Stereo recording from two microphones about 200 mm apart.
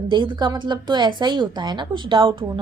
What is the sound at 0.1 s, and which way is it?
A woman's voice, 25° right (ahead or behind).